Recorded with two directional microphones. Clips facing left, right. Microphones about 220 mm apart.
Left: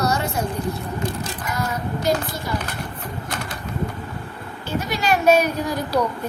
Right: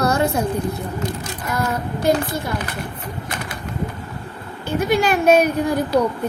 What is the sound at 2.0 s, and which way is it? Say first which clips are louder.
Speech: right 5 dB; 55° right (ahead or behind).